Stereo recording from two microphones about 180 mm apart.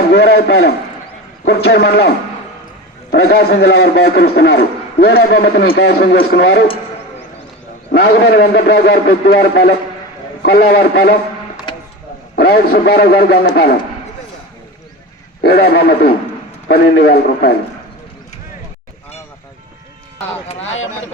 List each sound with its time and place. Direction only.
0.1 s a man's voice: 70° left (ahead or behind)
3.1 s a man's voice: 65° left (ahead or behind)
7.9 s a man's voice: 65° left (ahead or behind)
12.4 s a man's voice: 60° left (ahead or behind)
15.4 s a man's voice: 60° left (ahead or behind)